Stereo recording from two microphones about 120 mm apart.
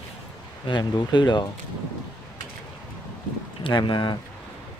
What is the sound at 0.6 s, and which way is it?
Speech, 40° left (ahead or behind).